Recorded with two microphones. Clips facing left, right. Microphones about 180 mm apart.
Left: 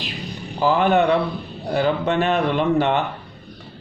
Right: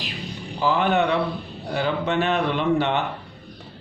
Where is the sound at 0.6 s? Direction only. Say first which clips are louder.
Left 4 dB; 45° left (ahead or behind).